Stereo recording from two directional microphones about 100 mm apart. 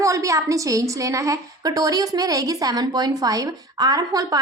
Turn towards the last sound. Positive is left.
turn(degrees=-40)  # may be behind; listen again after turning